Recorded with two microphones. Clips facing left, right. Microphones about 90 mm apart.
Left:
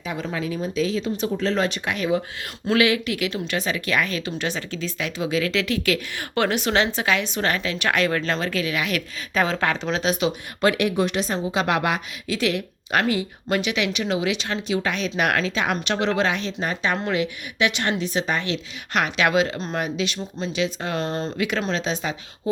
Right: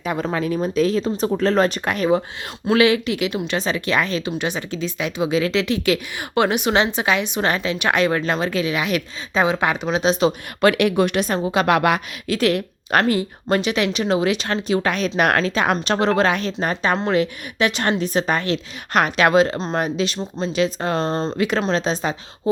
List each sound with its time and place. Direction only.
0.0 s a woman's voice: 55° right (ahead or behind)
2.7 s speech: 30° right (ahead or behind)
4.3 s speech: 15° right (ahead or behind)
10.6 s a woman's voice: 70° right (ahead or behind); by 19.5 s 40° right (ahead or behind)
19.5 s speech: 25° right (ahead or behind)